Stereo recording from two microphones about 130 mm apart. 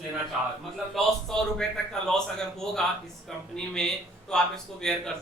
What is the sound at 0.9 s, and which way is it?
A man's voice, 5° left (ahead or behind).